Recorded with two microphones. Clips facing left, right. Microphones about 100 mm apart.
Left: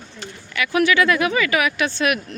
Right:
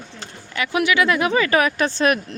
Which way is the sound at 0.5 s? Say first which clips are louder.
Left 1 dB; 25° right (ahead or behind).